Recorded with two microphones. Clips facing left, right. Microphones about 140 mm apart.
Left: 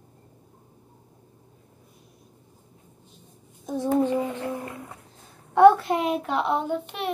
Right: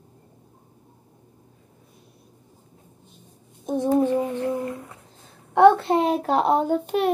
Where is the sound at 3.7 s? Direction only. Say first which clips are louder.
Right 3 dB; 15° right (ahead or behind).